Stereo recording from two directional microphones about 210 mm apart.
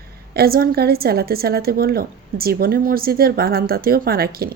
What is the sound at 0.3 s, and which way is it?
A woman's voice, 45° right (ahead or behind).